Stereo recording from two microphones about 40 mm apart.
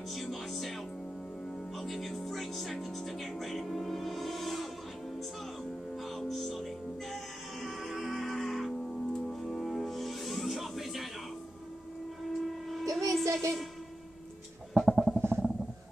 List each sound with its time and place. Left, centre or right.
0.1 s speech: centre
1.8 s speech: centre
6.0 s music: centre
12.3 s train: centre
14.9 s a sound: centre
15.1 s a sound: right